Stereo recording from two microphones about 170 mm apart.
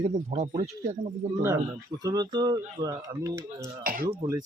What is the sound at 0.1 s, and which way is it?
Speech, 45° right (ahead or behind).